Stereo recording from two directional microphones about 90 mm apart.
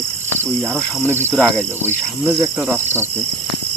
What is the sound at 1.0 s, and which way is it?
Cricket, 25° right (ahead or behind).